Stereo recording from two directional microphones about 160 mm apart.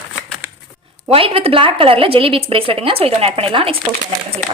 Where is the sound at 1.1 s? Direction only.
35° right (ahead or behind).